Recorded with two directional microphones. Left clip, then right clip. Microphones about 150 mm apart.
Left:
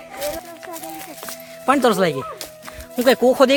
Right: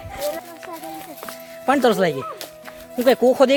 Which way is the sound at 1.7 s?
15° left (ahead or behind).